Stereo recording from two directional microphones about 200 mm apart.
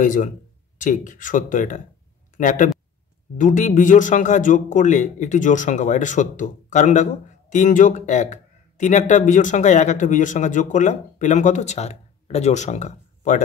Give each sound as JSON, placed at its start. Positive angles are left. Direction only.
{"t": 0.0, "sound": "speech", "side_deg": 40}